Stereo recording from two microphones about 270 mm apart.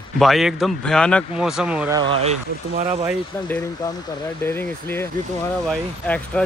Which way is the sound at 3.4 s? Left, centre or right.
Centre.